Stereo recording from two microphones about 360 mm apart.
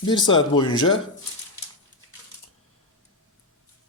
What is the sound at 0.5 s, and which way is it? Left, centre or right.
Speech, centre.